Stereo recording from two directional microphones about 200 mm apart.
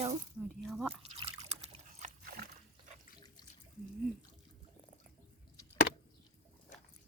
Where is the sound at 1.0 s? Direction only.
30° right (ahead or behind).